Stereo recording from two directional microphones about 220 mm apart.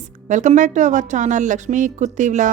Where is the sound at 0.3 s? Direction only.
35° right (ahead or behind).